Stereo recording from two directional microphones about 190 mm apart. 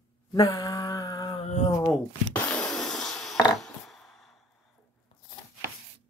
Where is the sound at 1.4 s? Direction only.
35° left (ahead or behind).